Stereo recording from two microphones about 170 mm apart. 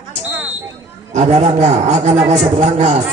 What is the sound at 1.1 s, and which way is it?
A man's voice, 45° right (ahead or behind).